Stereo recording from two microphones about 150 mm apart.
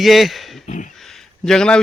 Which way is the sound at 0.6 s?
55° left (ahead or behind).